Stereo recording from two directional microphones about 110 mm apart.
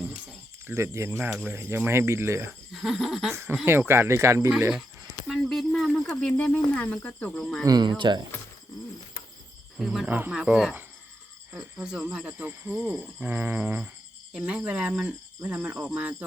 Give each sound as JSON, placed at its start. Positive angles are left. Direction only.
{"t": 0.7, "sound": "speech", "side_deg": -25}
{"t": 2.7, "sound": "speech", "side_deg": 0}
{"t": 3.7, "sound": "speech", "side_deg": -20}
{"t": 5.3, "sound": "speech", "side_deg": 5}
{"t": 7.6, "sound": "speech", "side_deg": -40}
{"t": 9.7, "sound": "speech", "side_deg": -5}
{"t": 10.1, "sound": "speech", "side_deg": -15}